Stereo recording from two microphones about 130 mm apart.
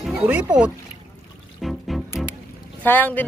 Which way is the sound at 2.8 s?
15° left (ahead or behind).